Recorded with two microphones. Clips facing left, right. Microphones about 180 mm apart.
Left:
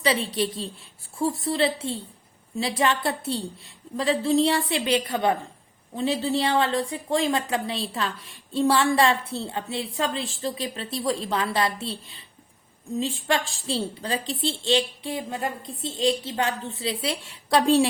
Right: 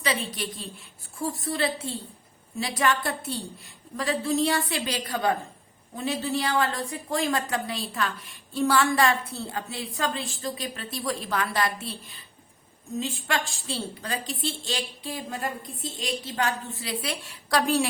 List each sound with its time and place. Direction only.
0.0 s a woman's voice: 30° left (ahead or behind)